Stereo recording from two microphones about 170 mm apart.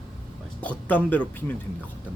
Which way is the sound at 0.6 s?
10° left (ahead or behind).